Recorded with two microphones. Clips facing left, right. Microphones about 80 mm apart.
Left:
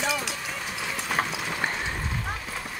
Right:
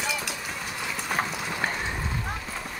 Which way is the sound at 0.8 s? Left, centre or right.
Centre.